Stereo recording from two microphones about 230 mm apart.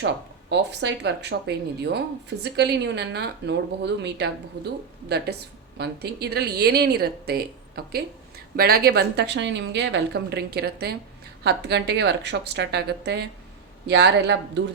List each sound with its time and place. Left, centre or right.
0.5 s a woman's voice: right